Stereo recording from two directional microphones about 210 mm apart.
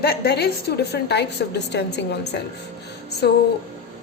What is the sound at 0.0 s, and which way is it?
A woman's voice, 50° left (ahead or behind).